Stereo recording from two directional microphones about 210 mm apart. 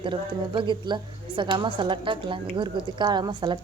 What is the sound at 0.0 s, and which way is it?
A woman's voice, 25° right (ahead or behind).